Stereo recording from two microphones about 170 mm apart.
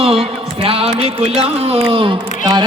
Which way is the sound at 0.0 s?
35° right (ahead or behind).